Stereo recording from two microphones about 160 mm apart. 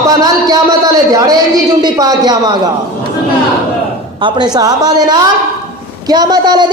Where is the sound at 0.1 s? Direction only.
25° right (ahead or behind).